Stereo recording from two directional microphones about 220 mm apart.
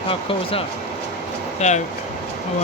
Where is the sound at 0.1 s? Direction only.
25° left (ahead or behind).